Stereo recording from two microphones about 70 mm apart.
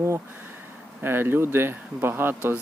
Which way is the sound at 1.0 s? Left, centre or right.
Right.